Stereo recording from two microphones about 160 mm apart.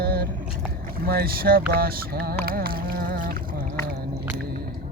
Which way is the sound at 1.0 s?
70° right (ahead or behind).